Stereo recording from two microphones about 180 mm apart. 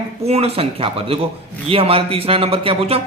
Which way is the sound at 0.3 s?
35° right (ahead or behind).